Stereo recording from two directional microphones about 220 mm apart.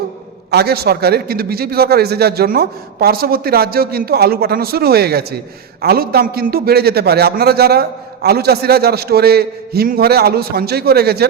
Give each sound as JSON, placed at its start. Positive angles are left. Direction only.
{"t": 0.5, "sound": "a man's voice", "side_deg": -45}